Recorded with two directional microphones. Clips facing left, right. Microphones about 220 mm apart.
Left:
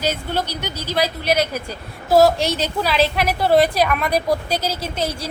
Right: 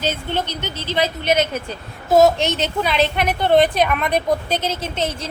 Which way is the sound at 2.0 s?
10° left (ahead or behind).